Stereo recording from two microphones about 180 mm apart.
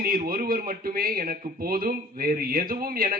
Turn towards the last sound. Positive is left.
turn(degrees=-55)  # may be behind; listen again after turning